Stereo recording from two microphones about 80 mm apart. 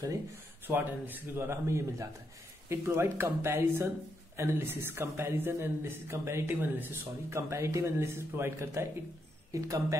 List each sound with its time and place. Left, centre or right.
0.7 s a man's voice: right
7.3 s a man's voice: right
9.5 s speech: right